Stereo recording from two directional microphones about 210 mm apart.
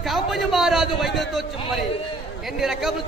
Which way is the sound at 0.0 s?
Centre (ahead or behind).